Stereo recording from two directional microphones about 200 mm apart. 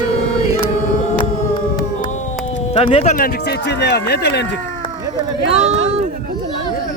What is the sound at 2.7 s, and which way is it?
Speech, 30° left (ahead or behind).